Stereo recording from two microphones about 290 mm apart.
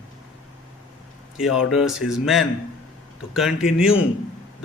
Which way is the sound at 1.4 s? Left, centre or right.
Centre.